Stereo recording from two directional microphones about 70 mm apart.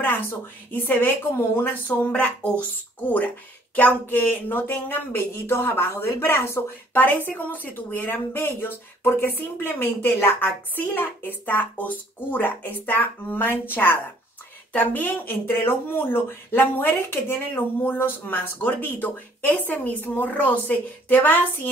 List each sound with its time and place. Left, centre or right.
0.0 s speech: left